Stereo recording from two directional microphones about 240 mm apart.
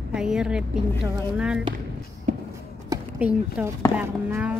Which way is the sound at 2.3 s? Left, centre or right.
Right.